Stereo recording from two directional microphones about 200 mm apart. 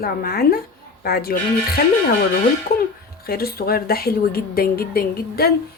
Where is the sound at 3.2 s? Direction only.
50° left (ahead or behind).